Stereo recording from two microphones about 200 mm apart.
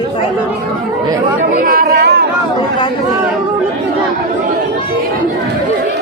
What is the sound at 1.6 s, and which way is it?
Speech, 45° right (ahead or behind).